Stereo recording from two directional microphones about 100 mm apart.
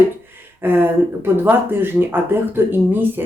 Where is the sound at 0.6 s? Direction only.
20° right (ahead or behind).